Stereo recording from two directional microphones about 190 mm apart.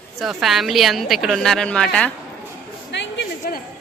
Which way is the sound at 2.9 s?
70° left (ahead or behind).